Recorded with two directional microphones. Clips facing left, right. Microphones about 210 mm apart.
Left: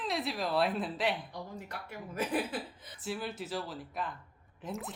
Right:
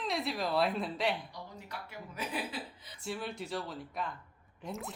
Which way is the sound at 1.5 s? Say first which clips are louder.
Left 2 dB; 50° left (ahead or behind).